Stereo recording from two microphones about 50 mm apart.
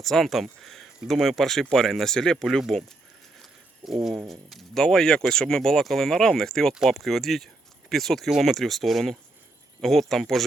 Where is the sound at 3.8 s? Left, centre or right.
Centre.